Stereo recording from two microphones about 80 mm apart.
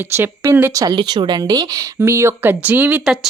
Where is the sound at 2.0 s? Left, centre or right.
Right.